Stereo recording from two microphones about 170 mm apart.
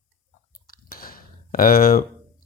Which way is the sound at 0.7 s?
60° left (ahead or behind).